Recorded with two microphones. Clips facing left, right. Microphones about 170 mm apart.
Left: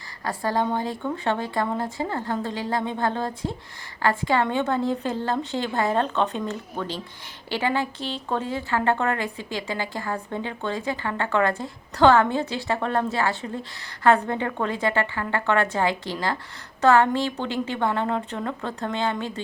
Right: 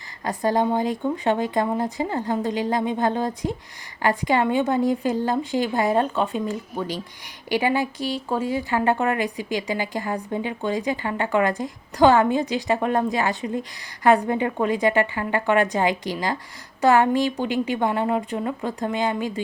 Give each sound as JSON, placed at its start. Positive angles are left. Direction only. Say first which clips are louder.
{"t": 0.3, "sound": "speech", "louder": "right 3 dB", "side_deg": -15}